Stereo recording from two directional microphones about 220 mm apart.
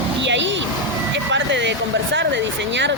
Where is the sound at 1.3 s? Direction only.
55° right (ahead or behind).